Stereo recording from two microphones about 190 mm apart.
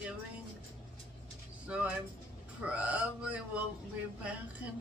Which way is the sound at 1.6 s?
5° right (ahead or behind).